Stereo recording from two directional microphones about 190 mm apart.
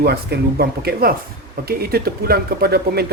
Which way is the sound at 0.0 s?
55° right (ahead or behind).